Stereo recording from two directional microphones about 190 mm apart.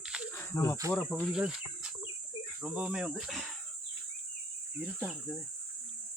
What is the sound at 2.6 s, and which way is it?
Speech, 5° right (ahead or behind).